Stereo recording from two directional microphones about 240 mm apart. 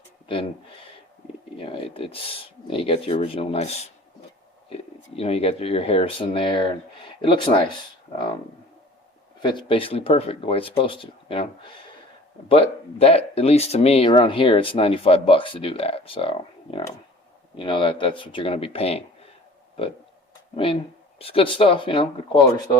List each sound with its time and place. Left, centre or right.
0.3 s speech: left
1.5 s speech: left
9.4 s speech: centre
21.2 s speech: left